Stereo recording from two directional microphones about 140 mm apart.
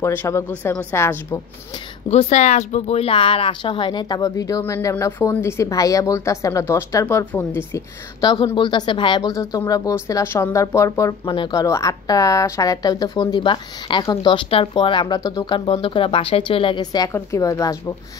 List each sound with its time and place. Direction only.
0.0 s speech: 20° left (ahead or behind)
2.0 s speech: 50° left (ahead or behind); by 7.8 s 20° left (ahead or behind)
8.2 s speech: 30° left (ahead or behind)
11.2 s speech: 35° left (ahead or behind)
11.6 s speech: 25° left (ahead or behind)